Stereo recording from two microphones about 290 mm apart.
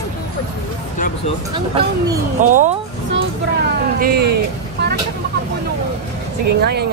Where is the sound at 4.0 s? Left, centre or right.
Right.